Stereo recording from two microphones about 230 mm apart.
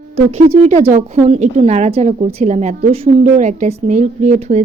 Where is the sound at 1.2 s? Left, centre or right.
Right.